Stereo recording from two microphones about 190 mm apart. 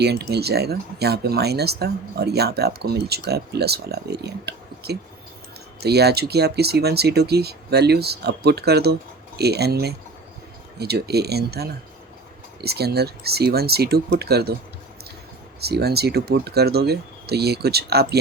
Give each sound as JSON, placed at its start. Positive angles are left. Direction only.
{"t": 0.0, "sound": "speech", "side_deg": -60}
{"t": 15.6, "sound": "speech", "side_deg": -55}